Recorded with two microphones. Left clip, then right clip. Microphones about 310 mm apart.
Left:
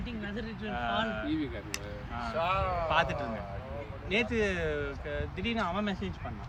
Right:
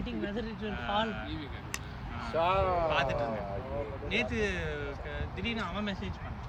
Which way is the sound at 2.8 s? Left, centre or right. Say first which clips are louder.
Even; centre.